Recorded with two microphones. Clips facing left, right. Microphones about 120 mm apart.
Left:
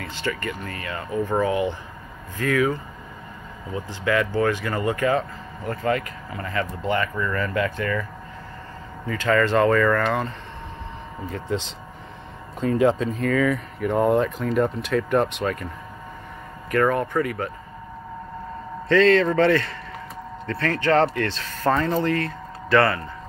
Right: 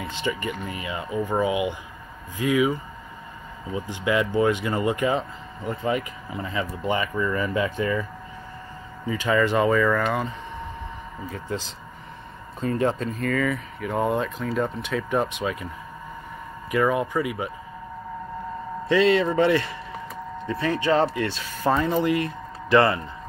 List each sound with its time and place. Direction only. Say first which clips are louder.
0.0 s speech: even; 15° right (ahead or behind)
12.8 s speech: left 5 dB; centre (ahead or behind)
16.7 s speech: left 2 dB; 10° right (ahead or behind)
18.9 s speech: left 2 dB; 15° right (ahead or behind)